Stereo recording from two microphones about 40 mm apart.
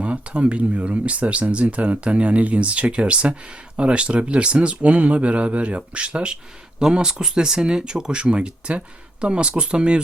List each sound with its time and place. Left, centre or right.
0.0 s speech: right